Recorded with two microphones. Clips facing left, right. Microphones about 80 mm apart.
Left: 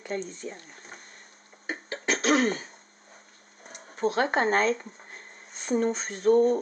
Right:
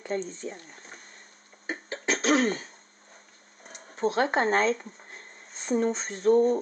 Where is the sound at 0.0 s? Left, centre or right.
Right.